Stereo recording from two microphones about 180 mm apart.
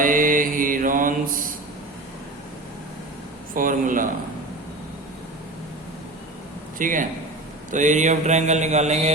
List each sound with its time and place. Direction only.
0.0 s mantra: 50° right (ahead or behind)
3.5 s speech: 50° right (ahead or behind)
6.7 s a man's voice: 45° right (ahead or behind)
7.7 s mantra: 45° right (ahead or behind)